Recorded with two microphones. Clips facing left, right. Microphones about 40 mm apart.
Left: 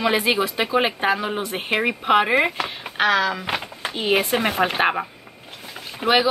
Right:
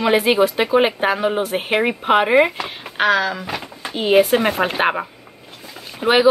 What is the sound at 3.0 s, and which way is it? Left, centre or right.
Speech, left.